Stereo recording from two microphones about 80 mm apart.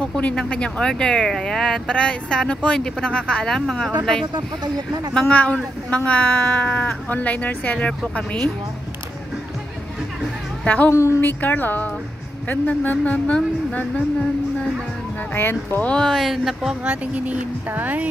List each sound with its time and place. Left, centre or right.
0.0 s speech: centre
5.2 s speech: centre
10.6 s a woman's voice: centre
10.9 s speech: left
11.2 s speech: left
15.3 s speech: left
15.9 s speech: centre; by 18.0 s right